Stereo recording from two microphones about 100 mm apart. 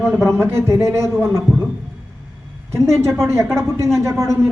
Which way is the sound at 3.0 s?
25° right (ahead or behind).